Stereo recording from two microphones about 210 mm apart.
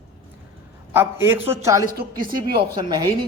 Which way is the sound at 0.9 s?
10° right (ahead or behind).